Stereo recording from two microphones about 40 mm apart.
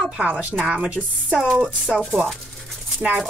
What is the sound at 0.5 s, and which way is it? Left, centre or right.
Speech, right.